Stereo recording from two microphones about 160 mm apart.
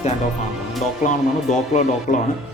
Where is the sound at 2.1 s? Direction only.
50° left (ahead or behind).